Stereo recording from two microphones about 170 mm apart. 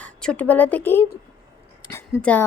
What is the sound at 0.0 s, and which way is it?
A woman's voice, 5° left (ahead or behind).